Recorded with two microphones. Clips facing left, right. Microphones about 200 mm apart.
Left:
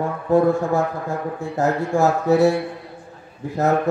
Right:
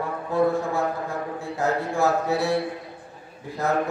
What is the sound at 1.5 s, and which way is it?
Speech, 45° left (ahead or behind).